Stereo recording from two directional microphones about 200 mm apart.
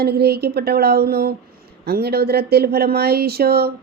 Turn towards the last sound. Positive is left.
turn(degrees=-50)  # may be behind; listen again after turning